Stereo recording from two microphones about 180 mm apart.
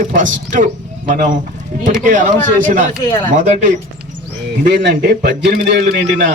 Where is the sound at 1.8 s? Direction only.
45° right (ahead or behind).